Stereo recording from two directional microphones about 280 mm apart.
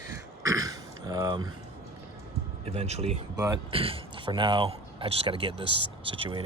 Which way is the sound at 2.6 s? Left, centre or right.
Right.